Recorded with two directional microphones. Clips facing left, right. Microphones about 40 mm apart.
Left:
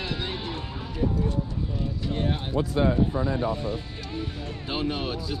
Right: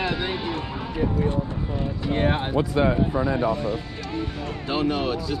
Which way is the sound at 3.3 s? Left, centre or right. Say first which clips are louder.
Right 4 dB; right.